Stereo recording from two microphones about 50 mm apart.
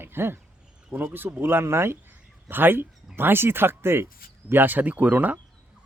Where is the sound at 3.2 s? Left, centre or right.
Right.